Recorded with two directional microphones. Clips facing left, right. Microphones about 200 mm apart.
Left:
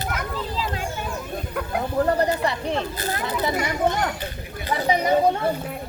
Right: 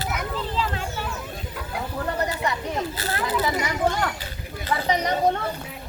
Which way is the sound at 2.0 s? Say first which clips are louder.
Left 6 dB; 35° left (ahead or behind).